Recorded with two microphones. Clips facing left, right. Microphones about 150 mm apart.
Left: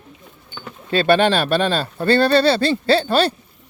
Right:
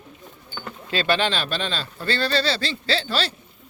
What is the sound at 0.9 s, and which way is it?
Speech, 55° left (ahead or behind).